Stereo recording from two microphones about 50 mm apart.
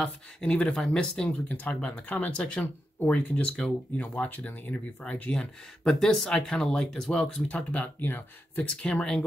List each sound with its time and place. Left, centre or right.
0.0 s speech: centre
1.8 s speech: left
5.3 s speech: centre
7.4 s speech: left
7.8 s speech: left
8.9 s speech: centre